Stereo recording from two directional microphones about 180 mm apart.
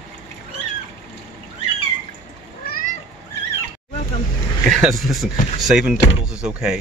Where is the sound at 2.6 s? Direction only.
55° left (ahead or behind).